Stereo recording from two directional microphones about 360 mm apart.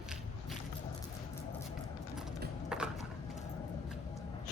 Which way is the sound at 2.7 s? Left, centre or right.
Centre.